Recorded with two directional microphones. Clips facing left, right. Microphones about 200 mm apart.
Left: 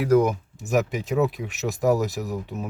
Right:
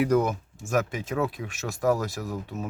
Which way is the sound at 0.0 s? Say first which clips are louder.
Left 4 dB; 10° left (ahead or behind).